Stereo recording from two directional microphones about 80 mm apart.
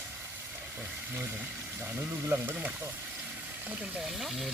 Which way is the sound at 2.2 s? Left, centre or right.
Right.